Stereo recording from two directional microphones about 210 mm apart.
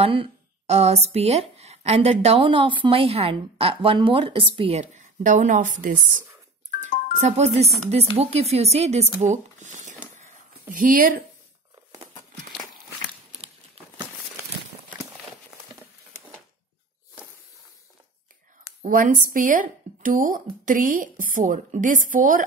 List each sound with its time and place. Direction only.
0.0 s a woman's voice: 25° right (ahead or behind)
7.2 s speech: 30° right (ahead or behind)
18.8 s speech: 40° right (ahead or behind)